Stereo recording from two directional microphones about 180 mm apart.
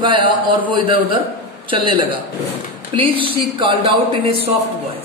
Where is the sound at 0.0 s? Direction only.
25° right (ahead or behind).